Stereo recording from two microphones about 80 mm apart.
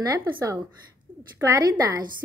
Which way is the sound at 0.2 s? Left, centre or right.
Right.